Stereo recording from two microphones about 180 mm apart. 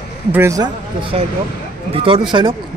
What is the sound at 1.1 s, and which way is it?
Speech, 35° right (ahead or behind).